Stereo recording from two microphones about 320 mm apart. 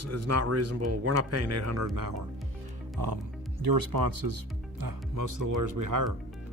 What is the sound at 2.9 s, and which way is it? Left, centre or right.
Music, right.